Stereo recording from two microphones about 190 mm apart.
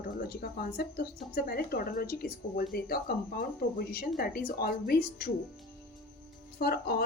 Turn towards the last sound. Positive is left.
turn(degrees=55)  # may be behind; listen again after turning